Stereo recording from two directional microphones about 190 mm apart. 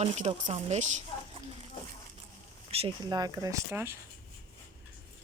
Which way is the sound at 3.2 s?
15° right (ahead or behind).